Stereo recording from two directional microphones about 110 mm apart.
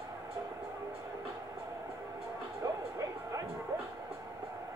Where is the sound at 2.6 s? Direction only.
30° right (ahead or behind).